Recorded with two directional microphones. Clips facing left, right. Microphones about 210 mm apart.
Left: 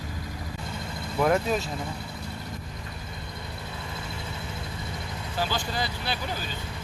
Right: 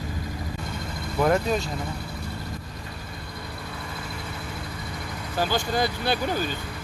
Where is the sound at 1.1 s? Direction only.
Centre (ahead or behind).